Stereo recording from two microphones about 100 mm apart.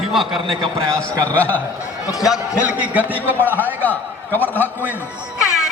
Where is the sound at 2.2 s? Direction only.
5° right (ahead or behind).